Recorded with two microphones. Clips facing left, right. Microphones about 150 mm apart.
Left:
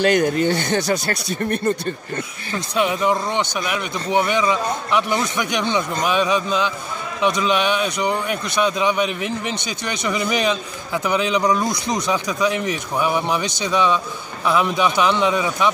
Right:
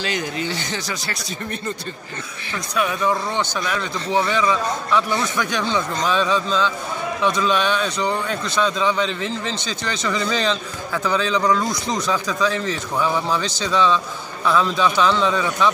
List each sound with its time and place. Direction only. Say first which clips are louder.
0.0 s speech: left 9 dB; 55° left (ahead or behind)
2.5 s a man's voice: left 3 dB; 25° left (ahead or behind)